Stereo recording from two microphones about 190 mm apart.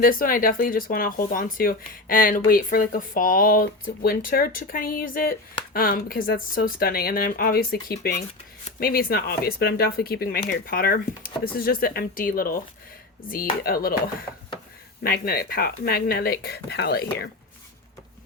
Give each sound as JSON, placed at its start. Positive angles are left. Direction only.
{"t": 0.0, "sound": "speech", "side_deg": 50}
{"t": 15.0, "sound": "speech", "side_deg": 50}